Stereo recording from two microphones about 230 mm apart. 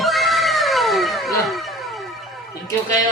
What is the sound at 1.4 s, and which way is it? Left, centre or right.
Music, centre.